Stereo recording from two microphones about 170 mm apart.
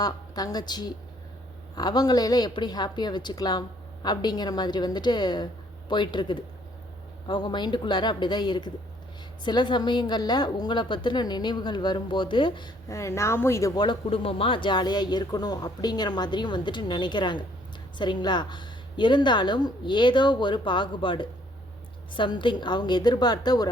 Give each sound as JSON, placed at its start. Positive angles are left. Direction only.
{"t": 0.0, "sound": "a woman's voice", "side_deg": 20}